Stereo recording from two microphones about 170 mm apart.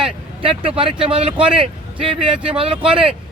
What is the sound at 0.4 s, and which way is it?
A man's voice, 35° right (ahead or behind).